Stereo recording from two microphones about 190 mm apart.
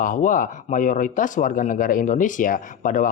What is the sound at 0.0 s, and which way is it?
Speech, 45° left (ahead or behind).